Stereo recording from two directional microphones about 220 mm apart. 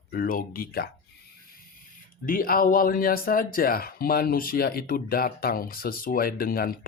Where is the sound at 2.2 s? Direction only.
40° left (ahead or behind).